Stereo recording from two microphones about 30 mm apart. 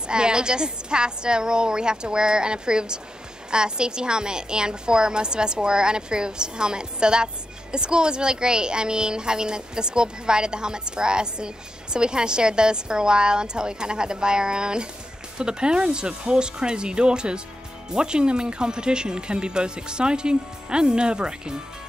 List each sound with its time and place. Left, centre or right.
0.1 s speech: right